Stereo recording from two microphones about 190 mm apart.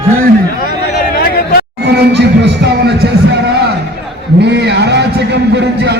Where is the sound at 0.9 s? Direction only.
55° left (ahead or behind).